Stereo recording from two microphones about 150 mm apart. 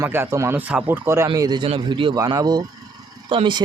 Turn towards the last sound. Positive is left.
turn(degrees=-35)  # may be behind; listen again after turning